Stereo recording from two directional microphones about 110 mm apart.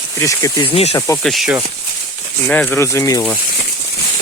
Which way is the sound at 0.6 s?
60° left (ahead or behind).